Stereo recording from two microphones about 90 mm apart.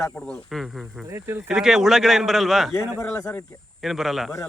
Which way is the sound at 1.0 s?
30° right (ahead or behind).